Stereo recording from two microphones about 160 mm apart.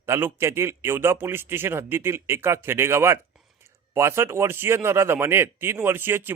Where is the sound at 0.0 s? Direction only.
15° right (ahead or behind).